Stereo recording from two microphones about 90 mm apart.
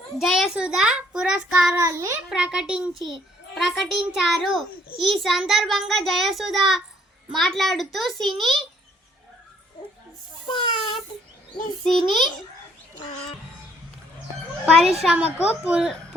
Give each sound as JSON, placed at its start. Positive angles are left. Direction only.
{"t": 0.2, "sound": "a child's voice", "side_deg": -5}
{"t": 1.7, "sound": "a child's voice", "side_deg": -30}
{"t": 2.3, "sound": "a woman's voice", "side_deg": -10}
{"t": 10.4, "sound": "a sound", "side_deg": 60}
{"t": 11.8, "sound": "a child's voice", "side_deg": 0}
{"t": 14.6, "sound": "a child's voice", "side_deg": -5}
{"t": 15.1, "sound": "a woman's voice", "side_deg": -15}